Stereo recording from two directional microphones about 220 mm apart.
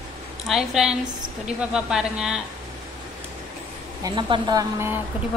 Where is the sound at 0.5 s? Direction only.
Centre (ahead or behind).